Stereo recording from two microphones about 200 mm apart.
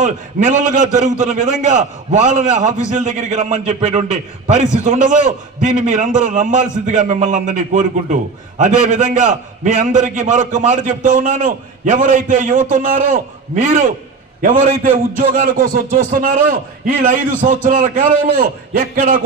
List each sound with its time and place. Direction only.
0.0 s a man's voice: 40° right (ahead or behind)